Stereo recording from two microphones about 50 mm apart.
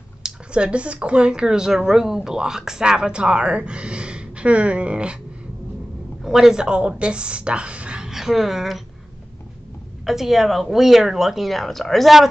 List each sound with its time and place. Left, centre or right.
0.2 s speech: centre
6.2 s speech: centre
8.1 s speech: centre
10.0 s speech: centre